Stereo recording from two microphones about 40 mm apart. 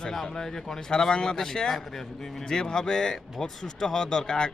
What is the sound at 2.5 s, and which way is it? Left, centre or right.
Speech, centre.